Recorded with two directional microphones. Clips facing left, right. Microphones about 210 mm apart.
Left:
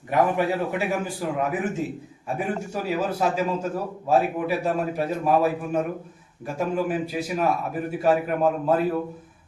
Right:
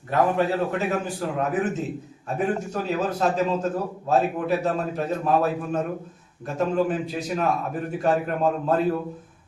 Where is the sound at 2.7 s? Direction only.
10° left (ahead or behind).